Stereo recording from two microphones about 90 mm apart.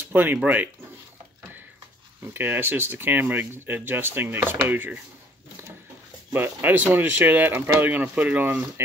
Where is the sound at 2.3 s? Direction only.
25° right (ahead or behind).